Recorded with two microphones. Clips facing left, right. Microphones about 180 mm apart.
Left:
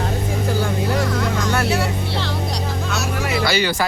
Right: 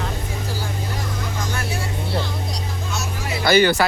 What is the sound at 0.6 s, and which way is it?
Vehicle, 70° left (ahead or behind).